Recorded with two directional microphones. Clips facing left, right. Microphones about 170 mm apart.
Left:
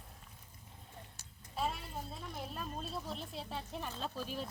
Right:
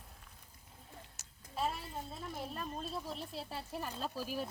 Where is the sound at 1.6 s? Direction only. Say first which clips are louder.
Right 1 dB; centre (ahead or behind).